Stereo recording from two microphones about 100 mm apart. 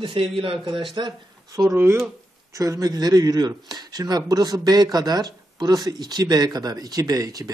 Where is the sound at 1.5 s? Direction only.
35° right (ahead or behind).